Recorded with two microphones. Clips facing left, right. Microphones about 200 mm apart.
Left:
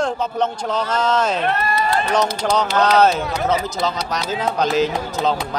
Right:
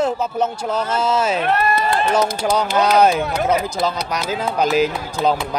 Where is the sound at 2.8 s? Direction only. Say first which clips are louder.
Right 1 dB; 10° right (ahead or behind).